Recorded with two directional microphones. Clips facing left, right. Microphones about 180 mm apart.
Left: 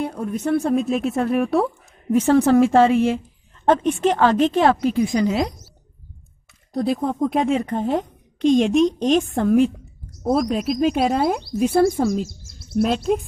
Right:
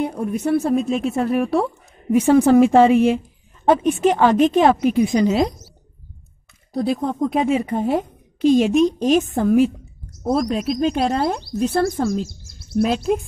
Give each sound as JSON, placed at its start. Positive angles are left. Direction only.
{"t": 0.0, "sound": "a woman's voice", "side_deg": -10}
{"t": 2.1, "sound": "speech", "side_deg": -10}
{"t": 6.7, "sound": "a woman's voice", "side_deg": 0}